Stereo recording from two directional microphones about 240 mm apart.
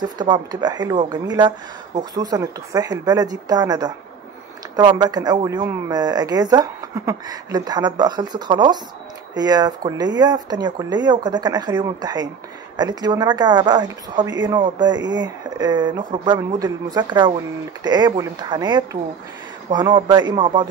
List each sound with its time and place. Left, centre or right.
0.0 s a man's voice: centre